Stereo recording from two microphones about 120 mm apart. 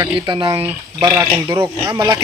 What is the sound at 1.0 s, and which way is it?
Speech, 20° right (ahead or behind).